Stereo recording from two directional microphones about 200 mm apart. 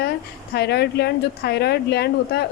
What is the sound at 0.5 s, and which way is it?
A woman's voice, 55° left (ahead or behind).